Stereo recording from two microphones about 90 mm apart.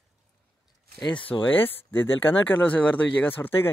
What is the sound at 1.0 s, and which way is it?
Speech, 65° left (ahead or behind).